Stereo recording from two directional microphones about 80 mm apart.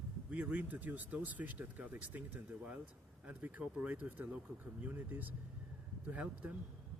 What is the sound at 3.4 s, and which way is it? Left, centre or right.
Speech, centre.